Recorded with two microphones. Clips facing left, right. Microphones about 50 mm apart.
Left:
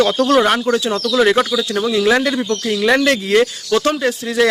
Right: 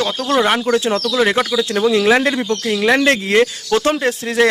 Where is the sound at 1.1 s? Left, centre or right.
Centre.